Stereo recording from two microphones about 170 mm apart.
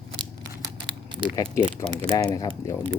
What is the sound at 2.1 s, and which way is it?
Speech, 20° left (ahead or behind).